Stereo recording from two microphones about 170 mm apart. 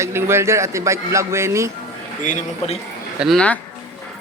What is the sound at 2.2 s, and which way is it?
Speech, 45° left (ahead or behind).